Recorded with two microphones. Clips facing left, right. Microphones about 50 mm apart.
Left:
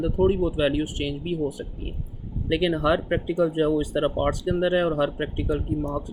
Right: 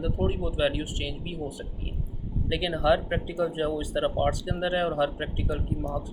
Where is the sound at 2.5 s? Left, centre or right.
Left.